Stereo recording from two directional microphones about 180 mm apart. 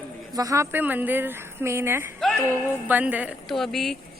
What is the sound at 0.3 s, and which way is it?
Speech, 15° right (ahead or behind).